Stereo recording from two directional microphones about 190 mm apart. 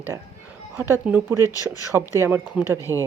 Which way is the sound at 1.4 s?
20° left (ahead or behind).